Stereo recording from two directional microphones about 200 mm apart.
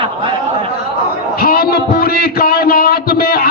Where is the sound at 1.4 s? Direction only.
50° left (ahead or behind).